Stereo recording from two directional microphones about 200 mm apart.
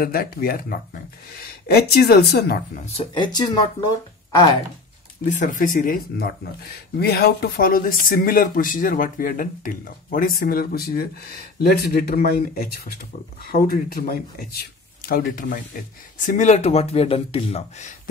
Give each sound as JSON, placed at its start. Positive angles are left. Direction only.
{"t": 0.0, "sound": "speech", "side_deg": 50}
{"t": 5.3, "sound": "speech", "side_deg": 40}